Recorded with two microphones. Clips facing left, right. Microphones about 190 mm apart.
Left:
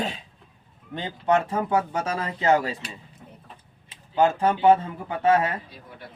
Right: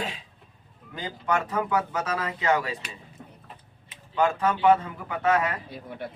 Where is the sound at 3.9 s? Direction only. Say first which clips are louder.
Left 3 dB; 30° left (ahead or behind).